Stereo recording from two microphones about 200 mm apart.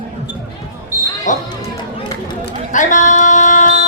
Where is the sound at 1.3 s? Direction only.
40° left (ahead or behind).